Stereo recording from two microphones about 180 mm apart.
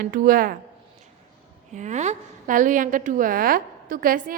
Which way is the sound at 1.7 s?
40° right (ahead or behind).